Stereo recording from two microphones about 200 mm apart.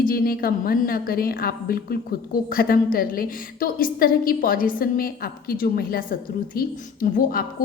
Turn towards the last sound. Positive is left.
turn(degrees=45)  # may be behind; listen again after turning